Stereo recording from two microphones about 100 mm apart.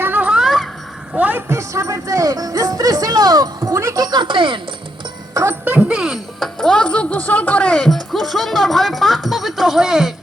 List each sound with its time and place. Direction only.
0.0 s a sound: 15° right (ahead or behind); by 0.7 s centre (ahead or behind)
1.1 s a woman's voice: 15° right (ahead or behind); by 4.6 s 55° right (ahead or behind)
5.3 s music: 30° right (ahead or behind)
5.6 s speech: 10° right (ahead or behind)
6.6 s speech: 5° left (ahead or behind)